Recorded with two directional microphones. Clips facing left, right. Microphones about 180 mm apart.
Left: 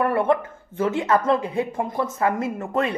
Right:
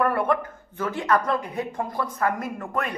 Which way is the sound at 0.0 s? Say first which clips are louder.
Left 3 dB; 25° left (ahead or behind).